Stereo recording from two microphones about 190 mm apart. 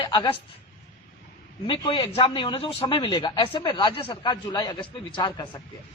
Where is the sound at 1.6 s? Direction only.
25° left (ahead or behind).